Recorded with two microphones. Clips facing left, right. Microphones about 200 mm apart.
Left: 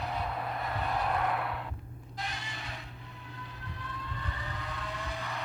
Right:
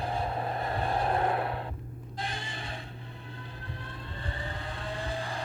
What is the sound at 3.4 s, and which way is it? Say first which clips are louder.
Vehicle: even; 30° right (ahead or behind).